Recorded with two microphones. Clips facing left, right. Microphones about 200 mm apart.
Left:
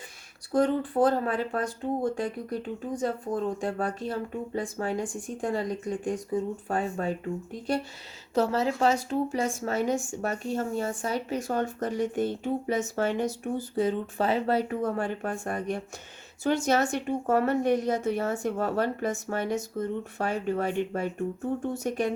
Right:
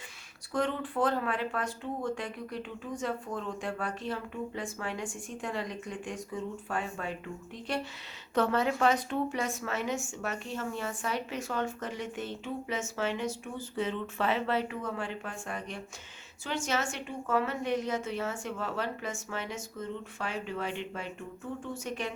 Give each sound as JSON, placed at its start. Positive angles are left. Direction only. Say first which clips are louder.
{"t": 0.5, "sound": "speech", "louder": "left 7 dB", "side_deg": 35}
{"t": 8.4, "sound": "speech", "louder": "left 2 dB", "side_deg": 30}